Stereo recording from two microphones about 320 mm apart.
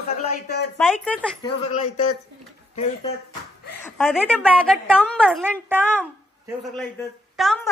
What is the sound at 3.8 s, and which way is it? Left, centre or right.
A woman's voice, centre.